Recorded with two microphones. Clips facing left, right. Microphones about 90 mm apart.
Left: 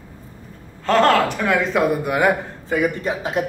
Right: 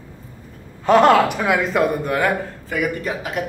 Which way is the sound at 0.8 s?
15° right (ahead or behind).